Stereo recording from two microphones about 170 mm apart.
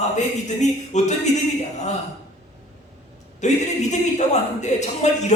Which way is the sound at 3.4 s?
45° left (ahead or behind).